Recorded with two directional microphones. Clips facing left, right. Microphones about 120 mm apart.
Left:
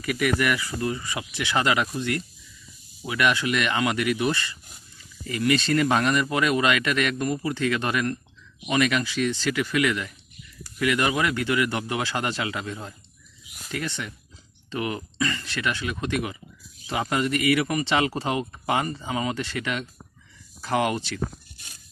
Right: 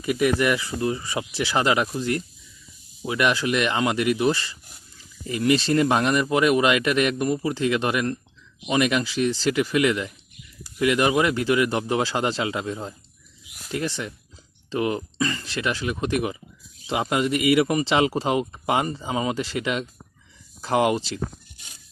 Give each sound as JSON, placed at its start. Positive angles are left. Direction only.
{"t": 0.0, "sound": "speech", "side_deg": -25}